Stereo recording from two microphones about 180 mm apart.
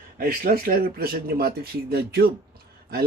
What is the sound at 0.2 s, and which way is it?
Speech, 55° right (ahead or behind).